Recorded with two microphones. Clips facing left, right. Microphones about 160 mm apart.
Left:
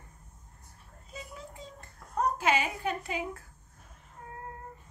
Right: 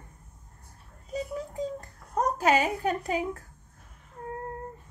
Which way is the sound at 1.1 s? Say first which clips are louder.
Right 12 dB; 40° right (ahead or behind).